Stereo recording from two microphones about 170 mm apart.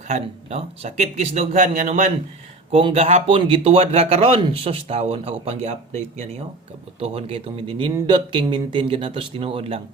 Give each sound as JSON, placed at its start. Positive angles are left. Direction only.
{"t": 0.1, "sound": "speech", "side_deg": -40}
{"t": 2.7, "sound": "speech", "side_deg": -35}